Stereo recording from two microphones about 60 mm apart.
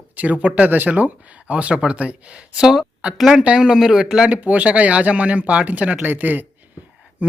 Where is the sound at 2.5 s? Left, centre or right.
Centre.